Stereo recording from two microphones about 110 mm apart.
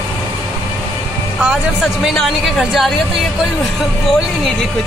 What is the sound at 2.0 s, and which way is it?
Speech, centre (ahead or behind).